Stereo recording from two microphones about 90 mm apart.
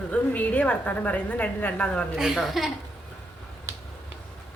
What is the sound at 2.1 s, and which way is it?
Speech, centre (ahead or behind).